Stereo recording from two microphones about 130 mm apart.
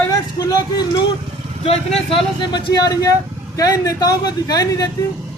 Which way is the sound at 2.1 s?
45° left (ahead or behind).